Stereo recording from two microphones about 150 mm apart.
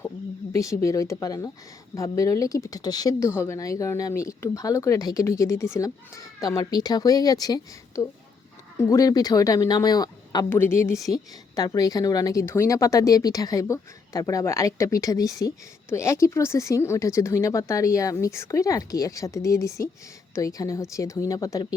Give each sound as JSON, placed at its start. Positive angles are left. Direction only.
{"t": 0.5, "sound": "speech", "side_deg": 20}
{"t": 10.5, "sound": "a woman's voice", "side_deg": 15}